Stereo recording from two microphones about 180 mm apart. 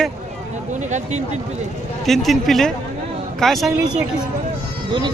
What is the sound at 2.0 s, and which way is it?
Speech, centre (ahead or behind).